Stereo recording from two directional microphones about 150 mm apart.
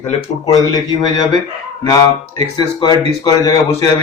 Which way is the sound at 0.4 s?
25° left (ahead or behind).